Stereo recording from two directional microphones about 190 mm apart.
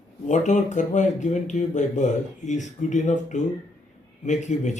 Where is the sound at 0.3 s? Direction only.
40° left (ahead or behind).